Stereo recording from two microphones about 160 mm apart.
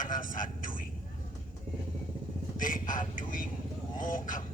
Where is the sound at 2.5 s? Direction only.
60° left (ahead or behind).